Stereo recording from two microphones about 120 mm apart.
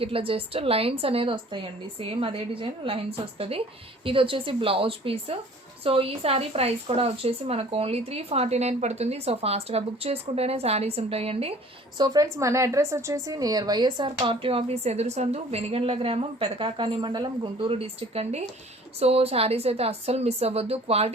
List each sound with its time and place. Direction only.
0.0 s a woman's voice: 50° right (ahead or behind)
11.9 s a woman's voice: 35° right (ahead or behind); by 21.1 s 55° right (ahead or behind)